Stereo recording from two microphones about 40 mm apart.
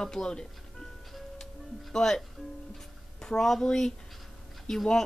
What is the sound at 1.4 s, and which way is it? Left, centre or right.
Music, centre.